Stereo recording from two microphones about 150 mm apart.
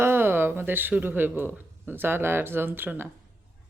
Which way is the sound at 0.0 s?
15° right (ahead or behind).